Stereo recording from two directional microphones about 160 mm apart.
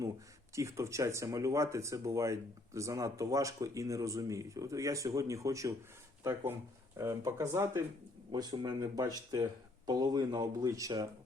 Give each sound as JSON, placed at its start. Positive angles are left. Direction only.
{"t": 0.5, "sound": "speech", "side_deg": -20}